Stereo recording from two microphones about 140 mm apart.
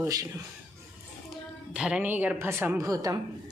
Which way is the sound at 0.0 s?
25° right (ahead or behind).